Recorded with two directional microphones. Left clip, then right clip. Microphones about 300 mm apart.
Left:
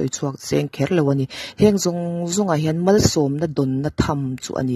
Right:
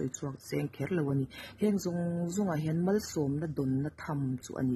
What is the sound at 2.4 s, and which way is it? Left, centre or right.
Speech, left.